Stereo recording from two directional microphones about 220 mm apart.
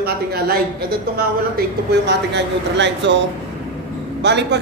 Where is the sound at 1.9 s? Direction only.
50° right (ahead or behind).